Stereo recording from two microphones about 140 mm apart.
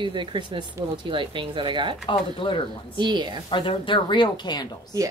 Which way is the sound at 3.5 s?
35° left (ahead or behind).